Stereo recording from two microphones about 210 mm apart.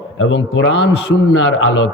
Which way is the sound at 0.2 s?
60° left (ahead or behind).